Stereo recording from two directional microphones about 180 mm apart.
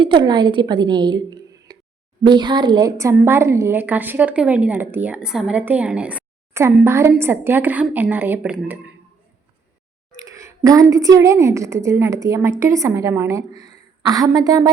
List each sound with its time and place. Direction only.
0.0 s a woman's voice: 25° right (ahead or behind); by 8.8 s 10° right (ahead or behind)
10.2 s a sound: 15° right (ahead or behind)
10.9 s a woman's voice: 20° right (ahead or behind)